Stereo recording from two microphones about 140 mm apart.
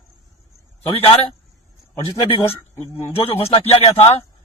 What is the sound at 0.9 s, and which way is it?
A man's voice, 45° left (ahead or behind).